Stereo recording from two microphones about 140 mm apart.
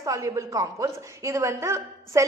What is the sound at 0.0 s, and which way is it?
A woman's voice, 20° right (ahead or behind).